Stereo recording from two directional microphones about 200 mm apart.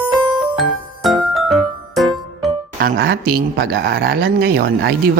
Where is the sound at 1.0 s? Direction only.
Centre (ahead or behind).